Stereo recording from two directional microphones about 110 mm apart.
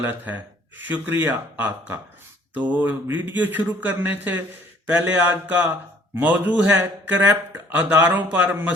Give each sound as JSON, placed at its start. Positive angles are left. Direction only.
{"t": 0.0, "sound": "a man's voice", "side_deg": -15}